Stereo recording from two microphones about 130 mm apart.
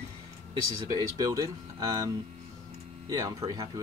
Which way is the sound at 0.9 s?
30° right (ahead or behind).